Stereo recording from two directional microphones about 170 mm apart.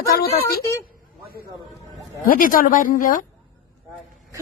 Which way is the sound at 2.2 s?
55° left (ahead or behind).